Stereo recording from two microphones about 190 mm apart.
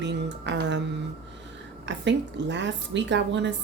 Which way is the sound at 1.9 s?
70° right (ahead or behind).